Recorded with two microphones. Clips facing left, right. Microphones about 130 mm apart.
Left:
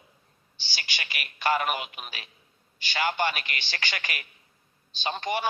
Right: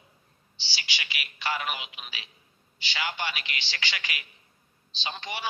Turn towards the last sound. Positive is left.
turn(degrees=50)  # may be behind; listen again after turning